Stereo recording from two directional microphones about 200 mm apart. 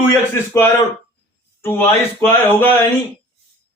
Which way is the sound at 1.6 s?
10° left (ahead or behind).